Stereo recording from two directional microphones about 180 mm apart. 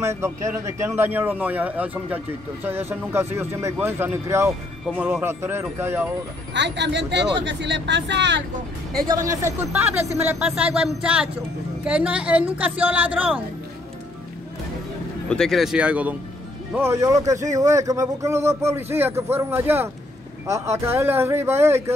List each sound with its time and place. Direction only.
0.0 s speech: 15° right (ahead or behind)
4.8 s speech: 5° right (ahead or behind)
6.5 s speech: 75° right (ahead or behind)
9.0 s speech: 15° right (ahead or behind)
15.2 s speech: 5° left (ahead or behind); by 21.9 s 15° right (ahead or behind)